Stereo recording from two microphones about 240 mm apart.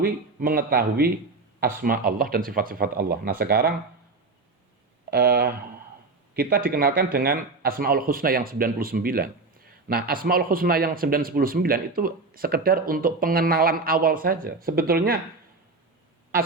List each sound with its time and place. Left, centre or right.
0.0 s a man's voice: right
5.1 s a man's voice: right